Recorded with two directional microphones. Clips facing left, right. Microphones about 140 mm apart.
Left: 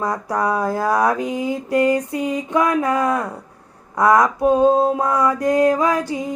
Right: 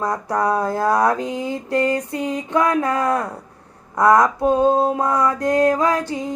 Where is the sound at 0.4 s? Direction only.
25° right (ahead or behind).